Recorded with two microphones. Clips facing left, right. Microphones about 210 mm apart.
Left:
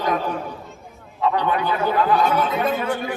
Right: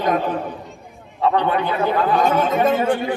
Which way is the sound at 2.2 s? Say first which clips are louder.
Right 3 dB; 45° right (ahead or behind).